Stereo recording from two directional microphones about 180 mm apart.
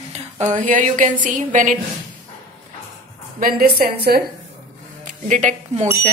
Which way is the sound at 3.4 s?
55° right (ahead or behind).